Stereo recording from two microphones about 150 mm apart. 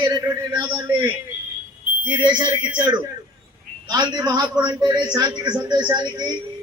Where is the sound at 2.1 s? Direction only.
30° right (ahead or behind).